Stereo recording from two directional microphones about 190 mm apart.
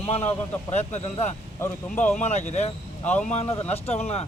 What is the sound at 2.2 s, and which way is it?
Speech, 35° left (ahead or behind).